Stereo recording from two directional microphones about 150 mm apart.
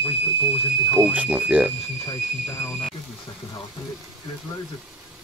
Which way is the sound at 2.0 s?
35° left (ahead or behind).